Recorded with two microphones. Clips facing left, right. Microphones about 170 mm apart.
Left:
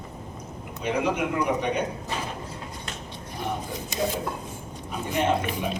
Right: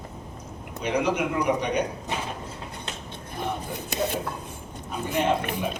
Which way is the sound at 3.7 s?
65° right (ahead or behind).